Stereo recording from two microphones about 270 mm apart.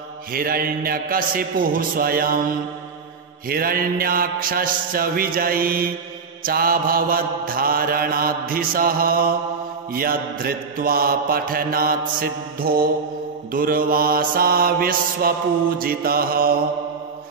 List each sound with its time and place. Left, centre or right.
0.3 s mantra: right
3.4 s mantra: right